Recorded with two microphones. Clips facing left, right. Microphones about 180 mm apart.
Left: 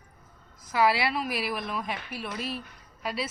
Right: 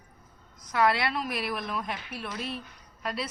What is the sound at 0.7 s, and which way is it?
A woman's voice, 5° left (ahead or behind).